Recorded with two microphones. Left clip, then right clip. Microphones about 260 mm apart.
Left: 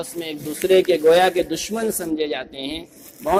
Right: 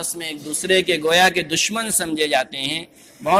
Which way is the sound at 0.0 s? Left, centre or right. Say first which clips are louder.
Even; right.